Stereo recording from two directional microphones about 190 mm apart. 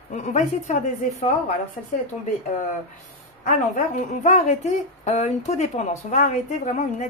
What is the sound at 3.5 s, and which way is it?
A woman's voice, 40° left (ahead or behind).